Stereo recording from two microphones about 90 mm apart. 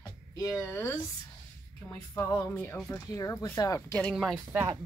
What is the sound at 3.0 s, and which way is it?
Speech, 40° left (ahead or behind).